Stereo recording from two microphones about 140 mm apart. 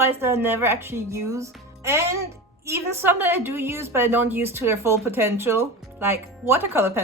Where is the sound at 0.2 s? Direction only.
20° right (ahead or behind).